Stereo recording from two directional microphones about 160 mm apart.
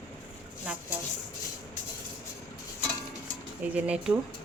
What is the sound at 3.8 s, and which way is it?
Speech, 5° right (ahead or behind).